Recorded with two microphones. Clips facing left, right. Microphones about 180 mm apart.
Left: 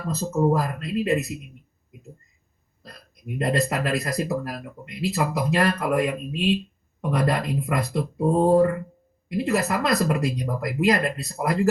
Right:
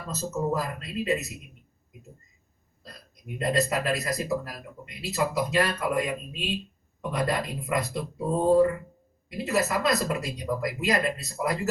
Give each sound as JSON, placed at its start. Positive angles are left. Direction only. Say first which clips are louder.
{"t": 0.0, "sound": "speech", "louder": "left 7 dB", "side_deg": 60}
{"t": 2.8, "sound": "speech", "louder": "left 5 dB", "side_deg": 60}